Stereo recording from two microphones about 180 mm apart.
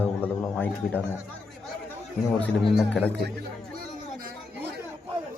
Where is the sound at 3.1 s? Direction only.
65° right (ahead or behind).